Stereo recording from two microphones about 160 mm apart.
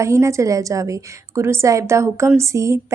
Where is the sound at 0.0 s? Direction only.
20° right (ahead or behind).